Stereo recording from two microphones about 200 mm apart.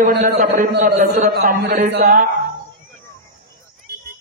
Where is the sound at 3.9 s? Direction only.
55° right (ahead or behind).